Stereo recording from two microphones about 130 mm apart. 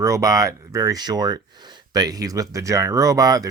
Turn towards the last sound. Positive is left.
turn(degrees=-30)  # may be behind; listen again after turning